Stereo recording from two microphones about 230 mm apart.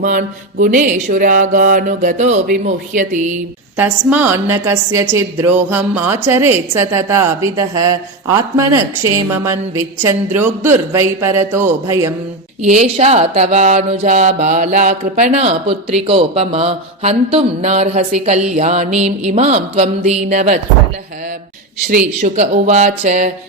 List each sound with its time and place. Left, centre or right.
0.0 s mantra: right
3.8 s a woman's voice: centre
12.6 s speech: right
21.8 s mantra: right